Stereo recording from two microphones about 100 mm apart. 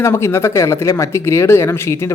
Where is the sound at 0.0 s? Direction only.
25° left (ahead or behind).